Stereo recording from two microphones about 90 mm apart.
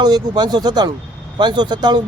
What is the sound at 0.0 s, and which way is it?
Speech, 50° right (ahead or behind).